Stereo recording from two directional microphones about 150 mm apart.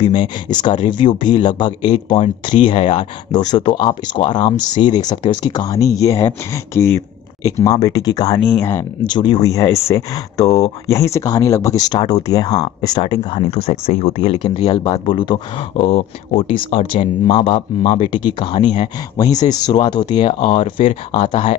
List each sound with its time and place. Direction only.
0.0 s speech: 30° left (ahead or behind)
2.6 s speech: 50° left (ahead or behind)
3.3 s speech: 30° left (ahead or behind)
9.0 s speech: 30° left (ahead or behind)
9.5 s speech: 20° left (ahead or behind); by 14.8 s 45° left (ahead or behind)
14.8 s speech: 35° left (ahead or behind)
15.8 s speech: 45° left (ahead or behind)